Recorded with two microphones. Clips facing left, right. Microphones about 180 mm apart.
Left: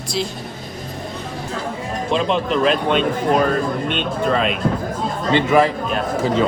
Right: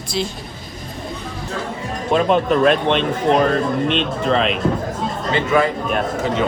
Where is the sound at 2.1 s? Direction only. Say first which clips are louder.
Right 4 dB; 45° right (ahead or behind).